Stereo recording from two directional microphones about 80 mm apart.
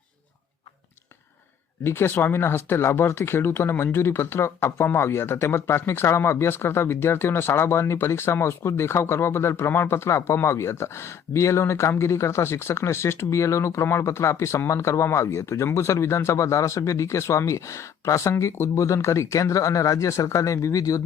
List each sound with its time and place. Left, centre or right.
1.8 s speech: left